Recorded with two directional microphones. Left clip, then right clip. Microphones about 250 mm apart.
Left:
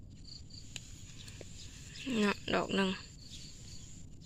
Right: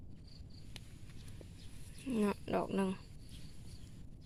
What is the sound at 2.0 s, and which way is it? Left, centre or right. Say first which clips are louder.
Speech: left 4 dB; centre.